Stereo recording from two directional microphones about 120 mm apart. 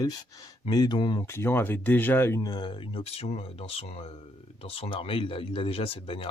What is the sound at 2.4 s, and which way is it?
Speech, 40° left (ahead or behind).